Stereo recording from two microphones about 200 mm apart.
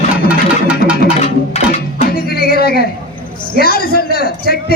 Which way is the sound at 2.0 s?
50° left (ahead or behind).